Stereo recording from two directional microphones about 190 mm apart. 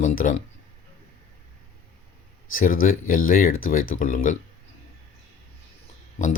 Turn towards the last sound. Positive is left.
turn(degrees=40)  # may be behind; listen again after turning